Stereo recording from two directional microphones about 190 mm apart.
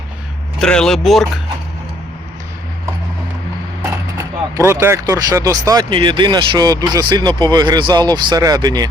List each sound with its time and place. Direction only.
0.6 s speech: 5° left (ahead or behind)
4.5 s speech: 15° right (ahead or behind)